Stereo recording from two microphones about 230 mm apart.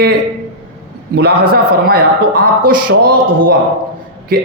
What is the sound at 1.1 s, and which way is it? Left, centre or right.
Speech, right.